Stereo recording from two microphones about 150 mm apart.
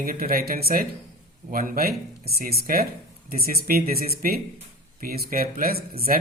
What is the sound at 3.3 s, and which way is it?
Speech, 90° right.